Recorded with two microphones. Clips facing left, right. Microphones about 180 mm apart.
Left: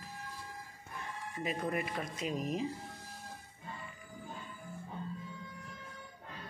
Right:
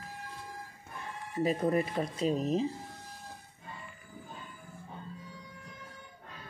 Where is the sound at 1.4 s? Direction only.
35° right (ahead or behind).